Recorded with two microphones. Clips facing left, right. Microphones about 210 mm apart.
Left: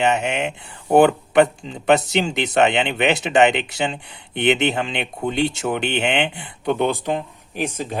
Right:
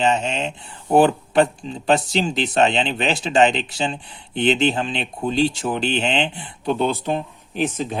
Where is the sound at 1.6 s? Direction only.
20° left (ahead or behind).